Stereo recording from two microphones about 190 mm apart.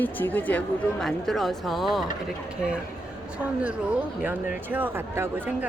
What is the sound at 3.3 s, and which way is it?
Speech, 5° right (ahead or behind).